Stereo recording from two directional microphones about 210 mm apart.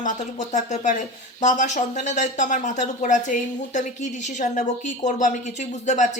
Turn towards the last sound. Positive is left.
turn(degrees=35)  # may be behind; listen again after turning